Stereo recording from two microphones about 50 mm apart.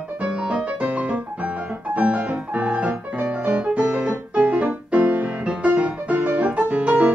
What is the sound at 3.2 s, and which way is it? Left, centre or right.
Music, right.